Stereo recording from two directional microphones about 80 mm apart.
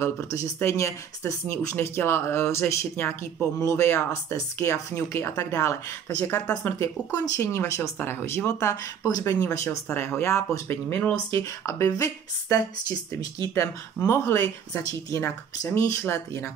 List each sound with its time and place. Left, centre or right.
0.6 s speech: left
6.0 s speech: left
6.6 s a woman's voice: left
14.0 s speech: left
14.8 s speech: left